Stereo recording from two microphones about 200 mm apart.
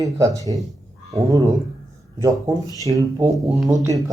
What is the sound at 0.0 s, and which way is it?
Speech, 15° right (ahead or behind).